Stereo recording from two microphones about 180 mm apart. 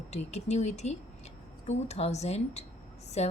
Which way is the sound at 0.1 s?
35° left (ahead or behind).